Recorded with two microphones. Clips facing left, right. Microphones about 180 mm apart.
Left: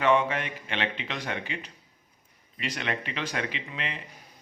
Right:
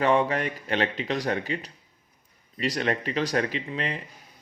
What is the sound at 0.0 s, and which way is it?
A man's voice, 35° right (ahead or behind).